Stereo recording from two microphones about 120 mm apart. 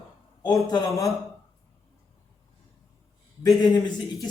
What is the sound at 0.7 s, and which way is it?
Speech, 25° left (ahead or behind).